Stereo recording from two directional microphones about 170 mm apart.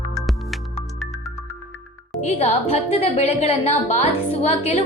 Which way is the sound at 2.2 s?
40° left (ahead or behind).